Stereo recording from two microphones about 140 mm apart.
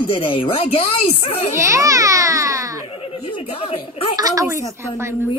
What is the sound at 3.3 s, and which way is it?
Speech, 40° left (ahead or behind).